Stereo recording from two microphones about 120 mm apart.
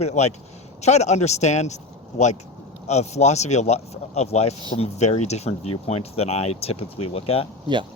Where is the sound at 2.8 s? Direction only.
65° left (ahead or behind).